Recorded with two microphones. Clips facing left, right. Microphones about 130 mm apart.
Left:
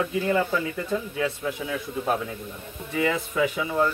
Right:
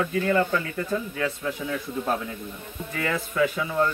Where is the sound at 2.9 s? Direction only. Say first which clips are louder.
Left 2 dB; 15° left (ahead or behind).